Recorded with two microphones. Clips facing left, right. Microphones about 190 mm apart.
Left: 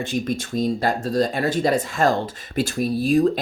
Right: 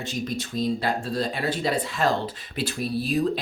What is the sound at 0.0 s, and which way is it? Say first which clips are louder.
Speech: left 5 dB; 50° left (ahead or behind).